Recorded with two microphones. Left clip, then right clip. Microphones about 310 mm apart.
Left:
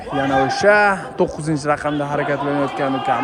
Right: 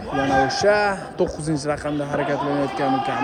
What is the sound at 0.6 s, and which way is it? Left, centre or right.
A man's voice, centre.